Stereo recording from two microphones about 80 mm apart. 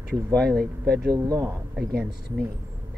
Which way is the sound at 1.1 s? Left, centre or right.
Right.